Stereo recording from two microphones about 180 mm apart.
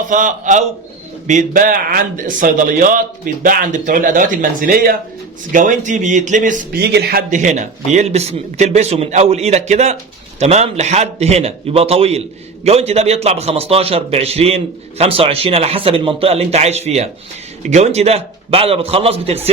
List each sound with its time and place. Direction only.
0.1 s a man's voice: 45° right (ahead or behind)
6.9 s a man's voice: 60° right (ahead or behind); by 19.4 s 35° right (ahead or behind)